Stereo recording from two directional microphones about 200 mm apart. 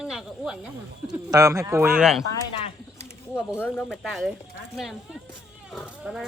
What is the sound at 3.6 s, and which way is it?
Speech, 10° left (ahead or behind).